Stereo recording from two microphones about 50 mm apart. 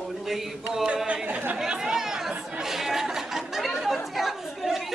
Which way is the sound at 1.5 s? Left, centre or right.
Centre.